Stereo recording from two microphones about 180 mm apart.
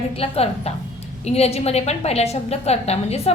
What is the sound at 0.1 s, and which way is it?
A woman's voice, 35° left (ahead or behind).